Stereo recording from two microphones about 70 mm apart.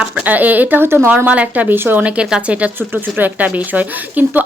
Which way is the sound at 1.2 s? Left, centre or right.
Centre.